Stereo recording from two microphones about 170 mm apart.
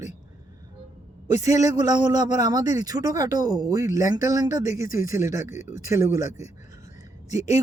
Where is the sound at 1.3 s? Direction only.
20° right (ahead or behind).